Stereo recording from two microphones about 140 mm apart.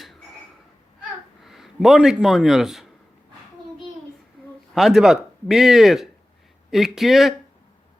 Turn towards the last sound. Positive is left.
turn(degrees=0)  # may be behind; listen again after turning